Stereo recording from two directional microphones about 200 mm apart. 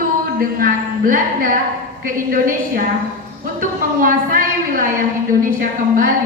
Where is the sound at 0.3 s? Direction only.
45° right (ahead or behind).